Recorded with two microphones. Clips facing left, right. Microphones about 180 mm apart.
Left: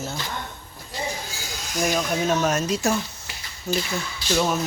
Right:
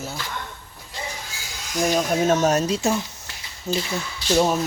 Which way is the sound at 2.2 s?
45° right (ahead or behind).